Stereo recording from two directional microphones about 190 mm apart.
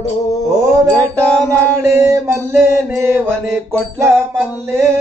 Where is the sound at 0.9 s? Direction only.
5° left (ahead or behind).